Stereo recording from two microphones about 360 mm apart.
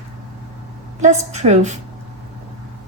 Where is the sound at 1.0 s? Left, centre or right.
Centre.